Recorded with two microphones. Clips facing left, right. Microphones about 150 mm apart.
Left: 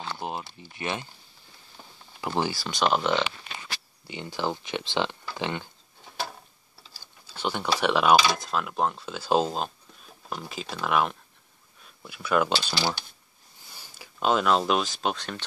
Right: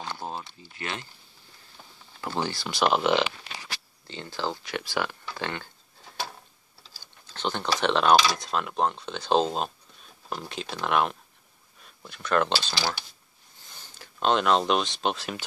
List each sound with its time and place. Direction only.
0.2 s a sound: 15° left (ahead or behind)
0.7 s speech: 20° left (ahead or behind)
2.1 s speech: 15° left (ahead or behind)
2.5 s speech: centre (ahead or behind)
3.5 s a sound: 85° right
4.1 s speech: 15° left (ahead or behind)
7.2 s speech: 10° left (ahead or behind)
13.7 s speech: 10° left (ahead or behind)